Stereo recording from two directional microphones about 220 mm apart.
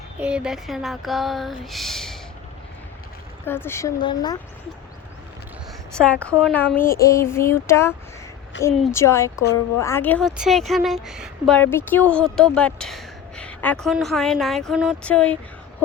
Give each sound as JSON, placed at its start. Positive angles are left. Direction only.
{"t": 0.2, "sound": "speech", "side_deg": -5}
{"t": 3.4, "sound": "speech", "side_deg": 10}
{"t": 5.9, "sound": "speech", "side_deg": 5}
{"t": 8.5, "sound": "a woman's voice", "side_deg": 55}
{"t": 8.9, "sound": "speech", "side_deg": 10}